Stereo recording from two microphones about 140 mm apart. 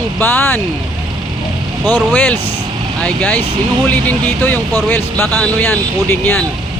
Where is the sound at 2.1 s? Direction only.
10° left (ahead or behind).